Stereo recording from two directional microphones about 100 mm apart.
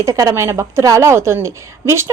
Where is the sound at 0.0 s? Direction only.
30° right (ahead or behind).